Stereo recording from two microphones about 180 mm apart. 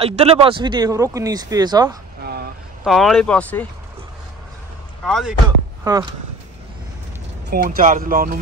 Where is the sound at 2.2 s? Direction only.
60° right (ahead or behind).